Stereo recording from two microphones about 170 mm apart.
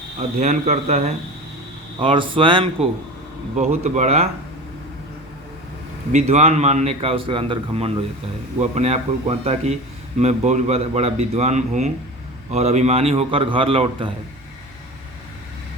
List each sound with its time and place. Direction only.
0.3 s a man's voice: 45° right (ahead or behind)
2.0 s speech: 30° right (ahead or behind)
3.6 s speech: 45° right (ahead or behind)
6.1 s a man's voice: 40° right (ahead or behind)